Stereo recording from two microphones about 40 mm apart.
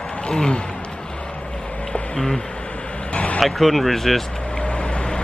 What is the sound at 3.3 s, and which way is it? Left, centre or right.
Speech, centre.